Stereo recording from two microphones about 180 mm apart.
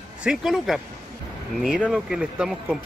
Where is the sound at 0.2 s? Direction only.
5° right (ahead or behind).